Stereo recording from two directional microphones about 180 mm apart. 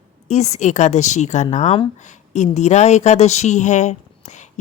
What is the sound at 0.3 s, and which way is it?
Speech, 40° left (ahead or behind).